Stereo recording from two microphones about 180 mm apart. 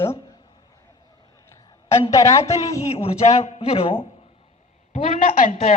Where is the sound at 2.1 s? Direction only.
20° left (ahead or behind).